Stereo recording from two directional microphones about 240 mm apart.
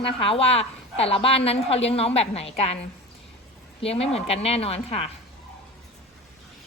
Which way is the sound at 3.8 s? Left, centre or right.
Left.